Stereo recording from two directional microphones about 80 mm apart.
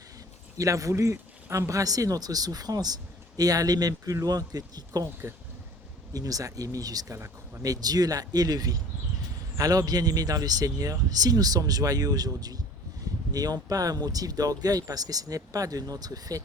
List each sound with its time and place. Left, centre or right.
0.5 s speech: right
6.1 s speech: right